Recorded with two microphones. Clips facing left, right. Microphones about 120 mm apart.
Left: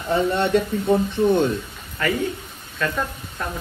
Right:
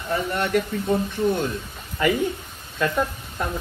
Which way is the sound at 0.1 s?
25° left (ahead or behind).